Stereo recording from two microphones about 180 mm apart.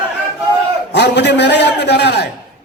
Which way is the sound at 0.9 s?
70° left (ahead or behind).